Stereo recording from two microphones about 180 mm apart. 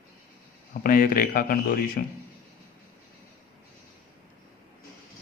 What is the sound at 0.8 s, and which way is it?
Speech, 50° left (ahead or behind).